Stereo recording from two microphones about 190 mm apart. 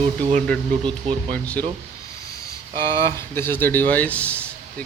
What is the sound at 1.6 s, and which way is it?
Speech, 10° left (ahead or behind).